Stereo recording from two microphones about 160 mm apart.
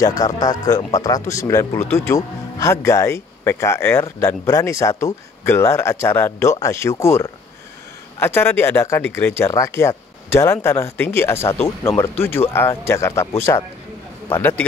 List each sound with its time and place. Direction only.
0.0 s speech: 20° left (ahead or behind)